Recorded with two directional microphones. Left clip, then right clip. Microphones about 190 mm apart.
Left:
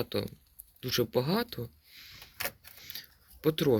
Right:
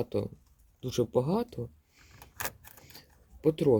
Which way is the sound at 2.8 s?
10° right (ahead or behind).